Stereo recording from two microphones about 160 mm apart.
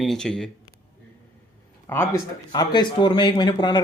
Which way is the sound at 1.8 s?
15° left (ahead or behind).